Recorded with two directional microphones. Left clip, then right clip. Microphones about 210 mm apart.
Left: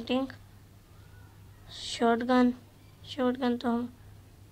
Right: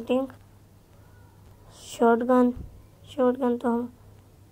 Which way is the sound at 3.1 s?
5° left (ahead or behind).